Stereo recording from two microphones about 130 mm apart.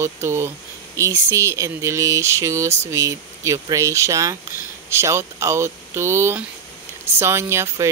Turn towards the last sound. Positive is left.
turn(degrees=-20)  # may be behind; listen again after turning